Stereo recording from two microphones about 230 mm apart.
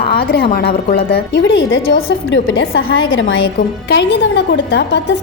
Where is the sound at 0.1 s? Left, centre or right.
Left.